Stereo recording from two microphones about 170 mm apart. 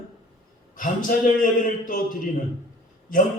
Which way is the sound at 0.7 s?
55° left (ahead or behind).